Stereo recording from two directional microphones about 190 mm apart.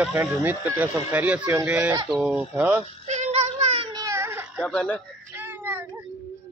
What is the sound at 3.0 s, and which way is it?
Child singing, 35° right (ahead or behind).